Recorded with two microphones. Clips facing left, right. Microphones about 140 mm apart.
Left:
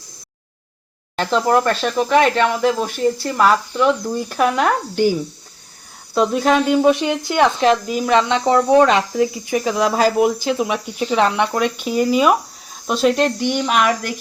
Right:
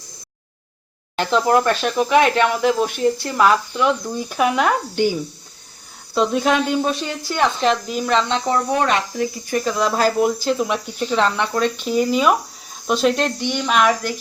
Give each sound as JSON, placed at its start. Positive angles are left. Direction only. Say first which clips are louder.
{"t": 1.1, "sound": "speech", "louder": "even", "side_deg": 0}
{"t": 6.8, "sound": "speech", "louder": "left 7 dB", "side_deg": 15}
{"t": 7.7, "sound": "speech", "louder": "left 3 dB", "side_deg": 5}
{"t": 8.4, "sound": "speech", "louder": "left 6 dB", "side_deg": 25}